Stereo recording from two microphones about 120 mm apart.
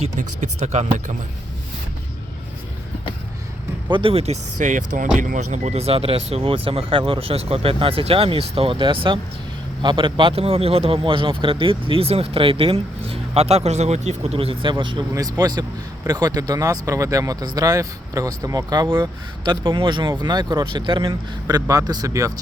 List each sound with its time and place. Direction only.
0.0 s speech: 80° right
3.8 s speech: 45° right (ahead or behind); by 14.3 s 65° right (ahead or behind)
14.3 s speech: 50° right (ahead or behind)
15.1 s speech: 30° right (ahead or behind)
21.5 s speech: 30° right (ahead or behind)